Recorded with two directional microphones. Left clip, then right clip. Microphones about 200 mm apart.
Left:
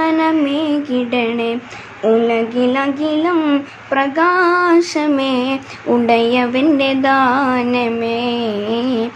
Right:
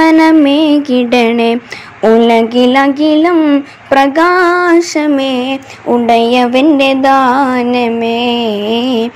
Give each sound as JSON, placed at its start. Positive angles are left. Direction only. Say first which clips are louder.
{"t": 0.0, "sound": "music", "louder": "right 8 dB", "side_deg": -35}
{"t": 3.9, "sound": "female singing", "louder": "right 6 dB", "side_deg": -30}